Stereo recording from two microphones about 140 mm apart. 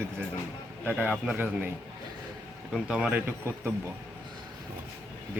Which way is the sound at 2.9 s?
5° right (ahead or behind).